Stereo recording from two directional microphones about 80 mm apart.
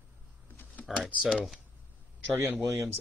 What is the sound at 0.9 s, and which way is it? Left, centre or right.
Speech, centre.